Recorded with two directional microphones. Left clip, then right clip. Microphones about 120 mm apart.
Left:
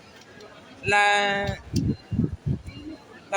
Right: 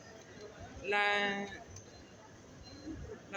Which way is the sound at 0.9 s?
40° left (ahead or behind).